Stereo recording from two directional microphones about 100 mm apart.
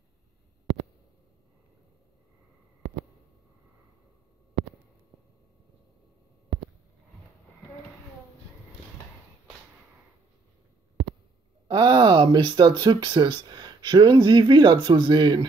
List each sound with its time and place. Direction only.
11.6 s speech: 50° right (ahead or behind)